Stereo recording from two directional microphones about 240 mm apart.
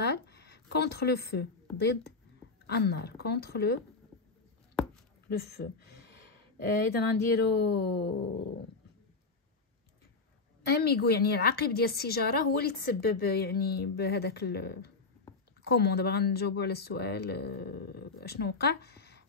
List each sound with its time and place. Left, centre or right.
0.0 s a woman's voice: left
6.9 s speech: left
10.7 s a woman's voice: left